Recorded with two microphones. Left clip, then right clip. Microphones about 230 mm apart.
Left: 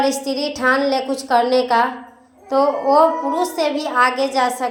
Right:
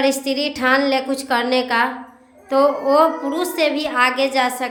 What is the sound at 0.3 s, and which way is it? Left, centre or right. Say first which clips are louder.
Speech: even; centre.